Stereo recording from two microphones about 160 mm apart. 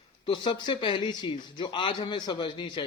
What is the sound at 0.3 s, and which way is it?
Speech, 30° left (ahead or behind).